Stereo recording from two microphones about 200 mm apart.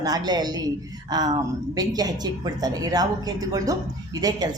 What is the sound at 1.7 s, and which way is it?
Speech, 20° right (ahead or behind).